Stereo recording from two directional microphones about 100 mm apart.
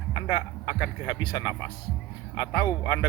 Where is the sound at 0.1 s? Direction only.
35° left (ahead or behind).